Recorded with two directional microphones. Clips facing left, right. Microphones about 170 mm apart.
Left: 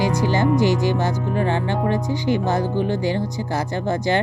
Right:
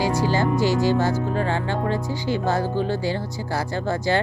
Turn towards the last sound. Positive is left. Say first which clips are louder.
# left 2 dB
turn(degrees=20)  # may be behind; listen again after turning